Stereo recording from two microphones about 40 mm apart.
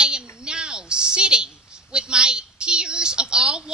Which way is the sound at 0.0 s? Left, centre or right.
Right.